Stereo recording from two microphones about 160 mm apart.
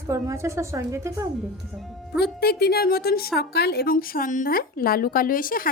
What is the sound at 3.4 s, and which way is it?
A woman's voice, 90° left.